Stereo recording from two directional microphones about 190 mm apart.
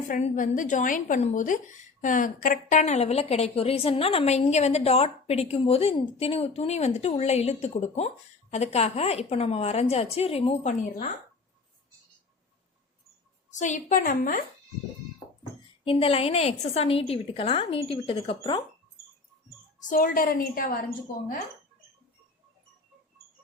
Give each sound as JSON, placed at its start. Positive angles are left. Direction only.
{"t": 0.1, "sound": "speech", "side_deg": 40}
{"t": 13.5, "sound": "a woman's voice", "side_deg": 40}
{"t": 15.8, "sound": "speech", "side_deg": 30}
{"t": 19.9, "sound": "a woman's voice", "side_deg": 50}